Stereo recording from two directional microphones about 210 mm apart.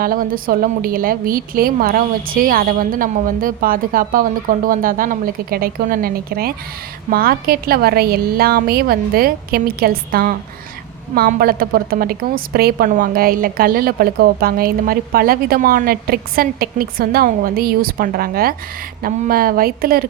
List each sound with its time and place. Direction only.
0.0 s a woman's voice: 40° right (ahead or behind)